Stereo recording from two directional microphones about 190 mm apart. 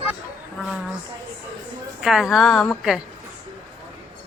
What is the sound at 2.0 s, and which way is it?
A woman's voice, centre (ahead or behind).